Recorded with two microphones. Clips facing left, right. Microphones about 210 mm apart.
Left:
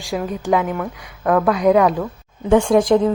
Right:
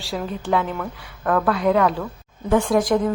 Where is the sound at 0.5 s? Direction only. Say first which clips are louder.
Left 3 dB; 15° left (ahead or behind).